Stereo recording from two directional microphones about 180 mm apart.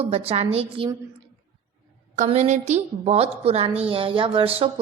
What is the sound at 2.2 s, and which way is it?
A woman's voice, 40° right (ahead or behind).